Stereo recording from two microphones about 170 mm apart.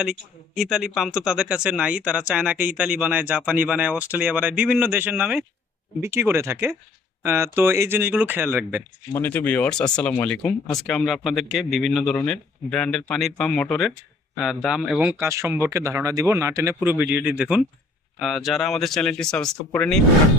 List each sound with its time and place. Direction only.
0.0 s a man's voice: 5° right (ahead or behind)
9.1 s speech: 10° left (ahead or behind)
15.2 s a man's voice: 15° right (ahead or behind); by 20.0 s 5° left (ahead or behind)